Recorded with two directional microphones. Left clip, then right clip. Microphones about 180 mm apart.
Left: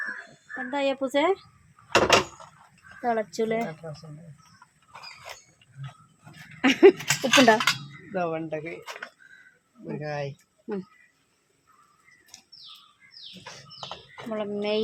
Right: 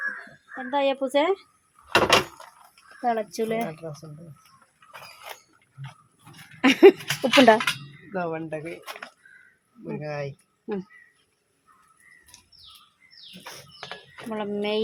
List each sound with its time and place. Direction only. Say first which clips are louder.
0.5 s speech: right 3 dB; 5° right (ahead or behind)
1.9 s door: right 1 dB; 5° right (ahead or behind)
3.0 s speech: right 1 dB; 10° right (ahead or behind)
3.7 s speech: right 2 dB; 45° right (ahead or behind)
6.6 s a sound: right 2 dB; 20° right (ahead or behind)
8.1 s speech: left 1 dB; 10° right (ahead or behind)
9.8 s speech: even; 5° right (ahead or behind)
14.3 s speech: even; 10° right (ahead or behind)